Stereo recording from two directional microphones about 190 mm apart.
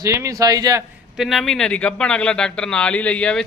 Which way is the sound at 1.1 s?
Centre (ahead or behind).